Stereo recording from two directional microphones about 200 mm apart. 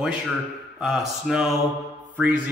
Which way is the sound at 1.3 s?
Centre (ahead or behind).